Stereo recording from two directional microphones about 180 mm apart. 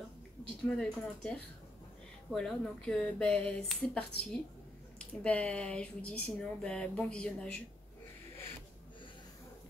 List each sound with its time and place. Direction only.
0.7 s speech: 5° left (ahead or behind)